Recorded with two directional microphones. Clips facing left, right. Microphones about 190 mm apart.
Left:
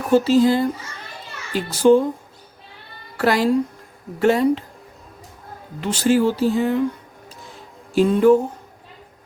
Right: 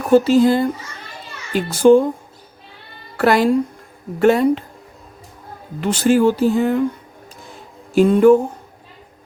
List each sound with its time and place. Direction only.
0.1 s speech: 55° right (ahead or behind)
3.2 s speech: 55° right (ahead or behind)
5.8 s speech: 55° right (ahead or behind)
7.9 s speech: 50° right (ahead or behind)